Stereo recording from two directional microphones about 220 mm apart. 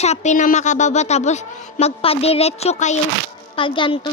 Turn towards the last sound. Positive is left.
turn(degrees=25)  # may be behind; listen again after turning